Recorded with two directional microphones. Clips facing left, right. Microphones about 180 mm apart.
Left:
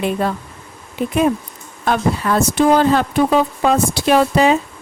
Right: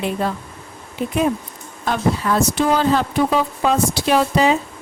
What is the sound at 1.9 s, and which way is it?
Speech, 55° left (ahead or behind).